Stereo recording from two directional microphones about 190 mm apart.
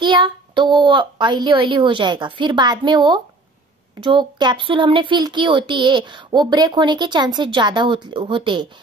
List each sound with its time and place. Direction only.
0.0 s a woman's voice: 25° right (ahead or behind)